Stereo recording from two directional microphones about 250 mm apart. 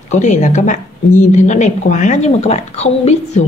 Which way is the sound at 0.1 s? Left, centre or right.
Left.